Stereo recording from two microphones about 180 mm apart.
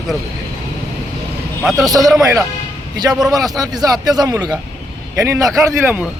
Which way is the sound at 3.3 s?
20° right (ahead or behind).